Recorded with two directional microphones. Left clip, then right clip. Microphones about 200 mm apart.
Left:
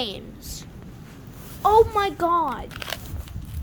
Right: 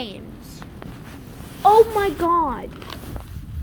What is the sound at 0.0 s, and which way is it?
Speech, 25° left (ahead or behind).